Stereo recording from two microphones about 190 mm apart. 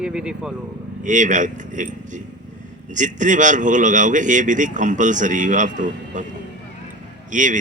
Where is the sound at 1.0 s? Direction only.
40° right (ahead or behind).